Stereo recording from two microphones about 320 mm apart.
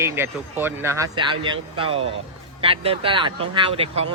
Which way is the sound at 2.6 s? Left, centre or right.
Centre.